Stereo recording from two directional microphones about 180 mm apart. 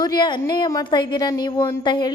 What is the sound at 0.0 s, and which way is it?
A woman's voice, 25° left (ahead or behind).